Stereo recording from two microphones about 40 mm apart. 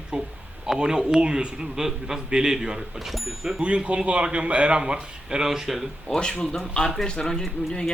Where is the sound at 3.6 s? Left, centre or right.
Right; by 5.8 s centre.